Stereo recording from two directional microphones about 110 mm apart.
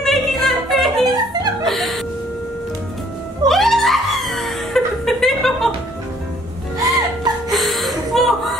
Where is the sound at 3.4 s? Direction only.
Centre (ahead or behind).